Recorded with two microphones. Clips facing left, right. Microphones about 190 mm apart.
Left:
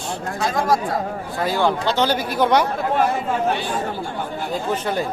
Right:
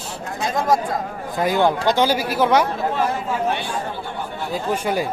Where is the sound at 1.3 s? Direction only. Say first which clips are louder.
Right 2 dB; 20° right (ahead or behind).